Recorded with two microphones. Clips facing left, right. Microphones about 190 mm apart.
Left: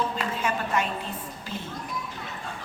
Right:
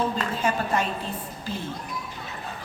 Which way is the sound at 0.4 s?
35° right (ahead or behind).